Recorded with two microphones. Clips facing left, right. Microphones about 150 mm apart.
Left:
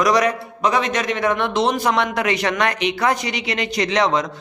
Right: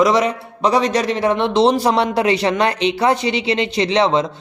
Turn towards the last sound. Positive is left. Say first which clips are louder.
# right 3 dB
turn(degrees=-25)  # may be behind; listen again after turning